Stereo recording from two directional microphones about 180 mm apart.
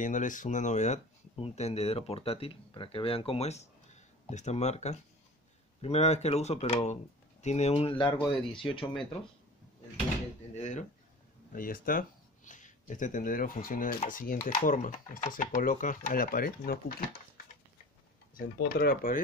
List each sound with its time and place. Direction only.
0.0 s speech: 45° left (ahead or behind); by 8.9 s 25° left (ahead or behind)
10.6 s a sound: 40° left (ahead or behind)
11.5 s speech: 50° left (ahead or behind)
18.3 s speech: 60° left (ahead or behind)